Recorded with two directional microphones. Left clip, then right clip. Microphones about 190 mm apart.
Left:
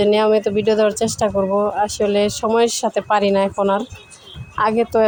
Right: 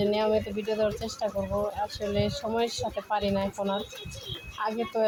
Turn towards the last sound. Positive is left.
turn(degrees=45)  # may be behind; listen again after turning